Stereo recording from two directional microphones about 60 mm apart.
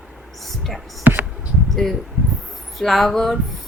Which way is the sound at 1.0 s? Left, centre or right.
Right.